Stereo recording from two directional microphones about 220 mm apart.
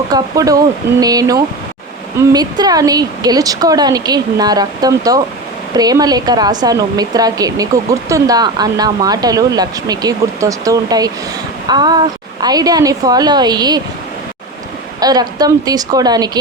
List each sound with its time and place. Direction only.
0.1 s speech: 15° right (ahead or behind)
15.0 s speech: 15° right (ahead or behind)